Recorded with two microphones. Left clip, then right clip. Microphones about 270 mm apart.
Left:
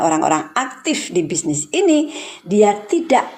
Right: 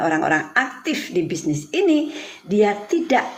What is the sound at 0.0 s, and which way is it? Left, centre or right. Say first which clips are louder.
A woman's voice: left 3 dB; left.